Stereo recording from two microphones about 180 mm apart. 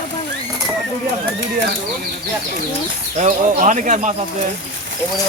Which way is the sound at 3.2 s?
45° right (ahead or behind).